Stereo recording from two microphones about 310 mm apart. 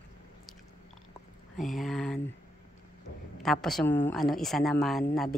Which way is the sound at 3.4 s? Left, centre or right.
Centre.